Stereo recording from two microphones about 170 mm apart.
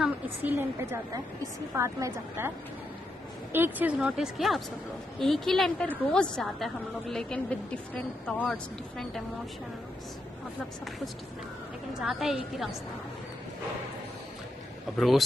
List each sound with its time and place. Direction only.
0.0 s a woman's voice: 10° right (ahead or behind)
3.5 s a woman's voice: 10° right (ahead or behind)
12.0 s a woman's voice: centre (ahead or behind)
15.0 s a woman's voice: centre (ahead or behind)